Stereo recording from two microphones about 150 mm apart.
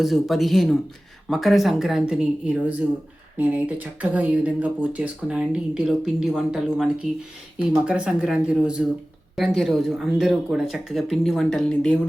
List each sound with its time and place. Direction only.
0.0 s speech: centre (ahead or behind)